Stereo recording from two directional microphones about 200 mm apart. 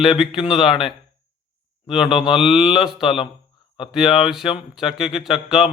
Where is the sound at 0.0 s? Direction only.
Centre (ahead or behind).